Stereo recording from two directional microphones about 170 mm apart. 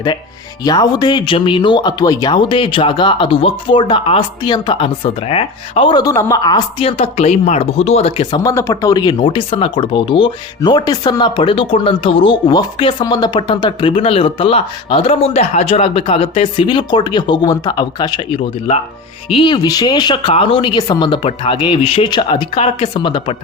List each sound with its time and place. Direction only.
0.6 s speech: 25° left (ahead or behind)
8.4 s speech: 20° left (ahead or behind)